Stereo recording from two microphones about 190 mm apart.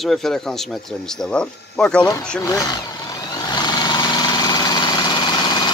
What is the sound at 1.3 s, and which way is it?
Speech, 5° left (ahead or behind).